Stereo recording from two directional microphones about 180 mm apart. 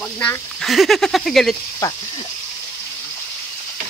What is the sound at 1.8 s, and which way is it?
Speech, 15° left (ahead or behind).